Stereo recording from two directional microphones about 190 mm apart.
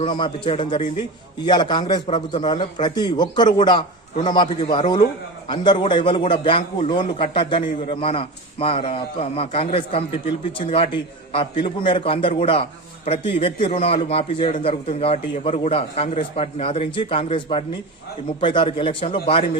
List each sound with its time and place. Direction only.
0.0 s a man's voice: 25° left (ahead or behind)